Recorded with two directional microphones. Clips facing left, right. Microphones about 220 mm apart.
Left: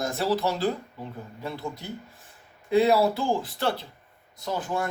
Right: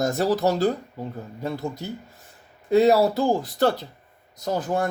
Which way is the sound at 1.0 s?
40° right (ahead or behind).